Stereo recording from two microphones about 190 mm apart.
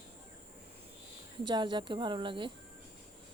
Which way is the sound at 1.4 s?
25° right (ahead or behind).